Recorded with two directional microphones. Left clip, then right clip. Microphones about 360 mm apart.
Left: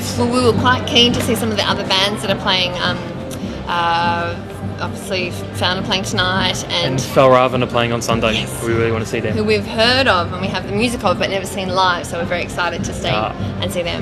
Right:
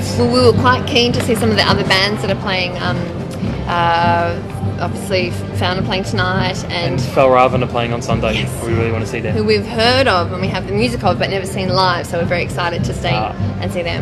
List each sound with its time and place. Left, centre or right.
0.3 s speech: centre
7.2 s speech: left
9.5 s speech: centre